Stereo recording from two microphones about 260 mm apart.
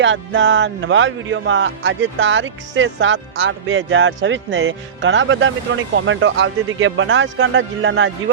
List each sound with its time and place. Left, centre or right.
0.0 s speech: right